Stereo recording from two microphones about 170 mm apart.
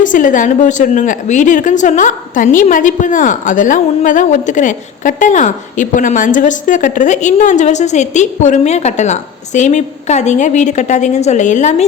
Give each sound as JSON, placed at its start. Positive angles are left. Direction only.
{"t": 0.0, "sound": "a woman's voice", "side_deg": 50}